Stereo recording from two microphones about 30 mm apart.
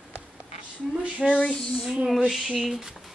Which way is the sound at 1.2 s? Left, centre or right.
Centre.